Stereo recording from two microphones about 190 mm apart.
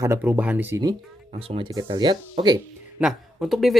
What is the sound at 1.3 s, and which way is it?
Speech, 30° right (ahead or behind).